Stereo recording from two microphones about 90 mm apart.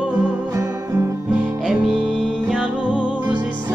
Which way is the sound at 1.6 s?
5° right (ahead or behind).